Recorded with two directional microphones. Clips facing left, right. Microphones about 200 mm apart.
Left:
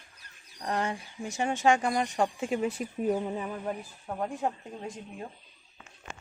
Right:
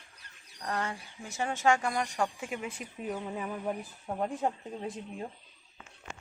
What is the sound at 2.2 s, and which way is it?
Speech, 30° left (ahead or behind).